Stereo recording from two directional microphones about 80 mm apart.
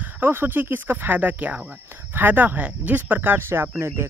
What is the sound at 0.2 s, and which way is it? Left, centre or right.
Speech, right.